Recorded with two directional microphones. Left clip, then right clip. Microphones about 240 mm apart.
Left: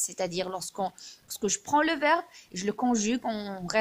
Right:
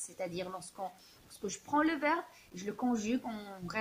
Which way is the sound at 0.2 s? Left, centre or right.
Left.